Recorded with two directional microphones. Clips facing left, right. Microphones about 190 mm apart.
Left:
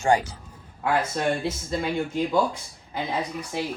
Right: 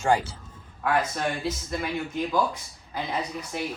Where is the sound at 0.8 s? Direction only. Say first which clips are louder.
Left 1 dB; 25° left (ahead or behind).